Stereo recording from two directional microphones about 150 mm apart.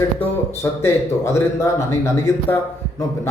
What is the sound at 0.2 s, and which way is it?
Speech, 15° left (ahead or behind).